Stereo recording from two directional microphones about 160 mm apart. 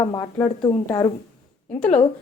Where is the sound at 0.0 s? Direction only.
25° left (ahead or behind).